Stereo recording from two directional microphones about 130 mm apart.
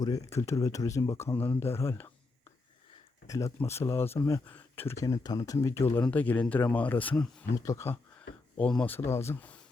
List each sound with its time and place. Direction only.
0.0 s speech: 25° left (ahead or behind)
3.2 s speech: 25° left (ahead or behind)
7.5 s speech: 25° left (ahead or behind)
8.5 s speech: 10° left (ahead or behind)